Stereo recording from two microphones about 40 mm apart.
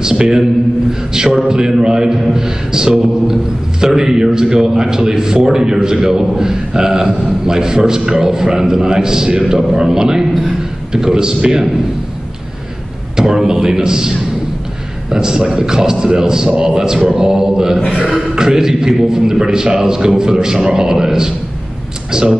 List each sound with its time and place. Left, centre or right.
0.0 s a man's voice: centre
13.1 s a sound: centre
13.5 s a man's voice: centre